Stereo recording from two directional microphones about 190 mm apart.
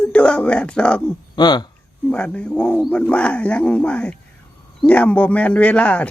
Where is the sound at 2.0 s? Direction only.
5° left (ahead or behind).